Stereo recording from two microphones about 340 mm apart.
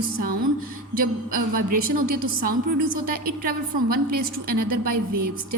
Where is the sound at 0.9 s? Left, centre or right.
Right.